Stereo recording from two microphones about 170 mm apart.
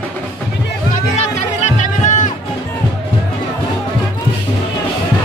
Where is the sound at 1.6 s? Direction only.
45° left (ahead or behind).